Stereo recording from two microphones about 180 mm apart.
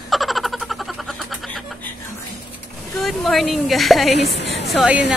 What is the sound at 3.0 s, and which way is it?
A woman's voice, centre (ahead or behind).